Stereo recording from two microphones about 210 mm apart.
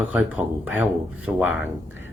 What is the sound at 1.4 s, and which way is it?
Speech, 70° left (ahead or behind).